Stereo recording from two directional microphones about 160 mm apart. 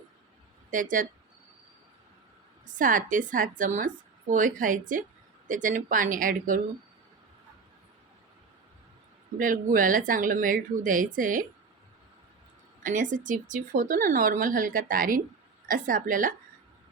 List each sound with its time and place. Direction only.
0.7 s a woman's voice: 55° right (ahead or behind)
2.7 s a woman's voice: 55° right (ahead or behind)
9.4 s a woman's voice: 55° right (ahead or behind)
12.8 s a woman's voice: 55° right (ahead or behind)